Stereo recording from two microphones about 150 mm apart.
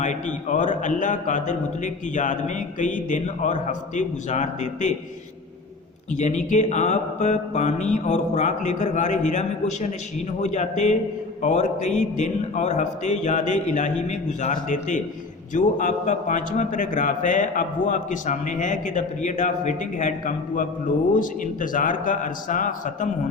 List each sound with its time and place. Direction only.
0.0 s a man's voice: 55° left (ahead or behind)
6.1 s a man's voice: 50° left (ahead or behind)